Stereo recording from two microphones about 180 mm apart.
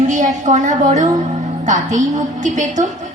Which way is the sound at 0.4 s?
40° right (ahead or behind).